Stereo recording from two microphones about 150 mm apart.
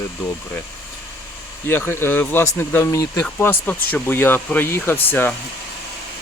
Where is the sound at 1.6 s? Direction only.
15° left (ahead or behind).